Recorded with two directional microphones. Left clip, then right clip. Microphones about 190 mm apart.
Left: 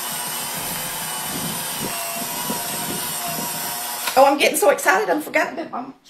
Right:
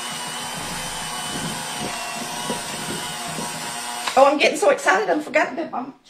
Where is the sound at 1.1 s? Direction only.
5° left (ahead or behind).